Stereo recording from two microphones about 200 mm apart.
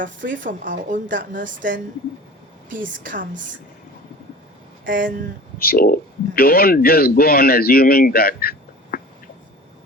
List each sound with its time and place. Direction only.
0.0 s speech: 40° right (ahead or behind)
4.9 s speech: 45° right (ahead or behind)
5.5 s speech: 45° left (ahead or behind)